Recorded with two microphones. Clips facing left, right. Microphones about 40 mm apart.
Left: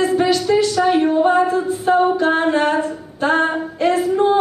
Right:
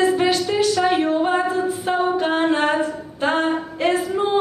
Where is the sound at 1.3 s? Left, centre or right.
Right.